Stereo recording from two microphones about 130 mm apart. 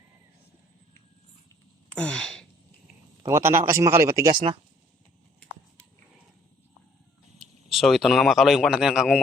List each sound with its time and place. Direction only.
2.0 s a sound: 5° left (ahead or behind)
3.2 s a man's voice: 20° right (ahead or behind)
7.3 s speech: centre (ahead or behind)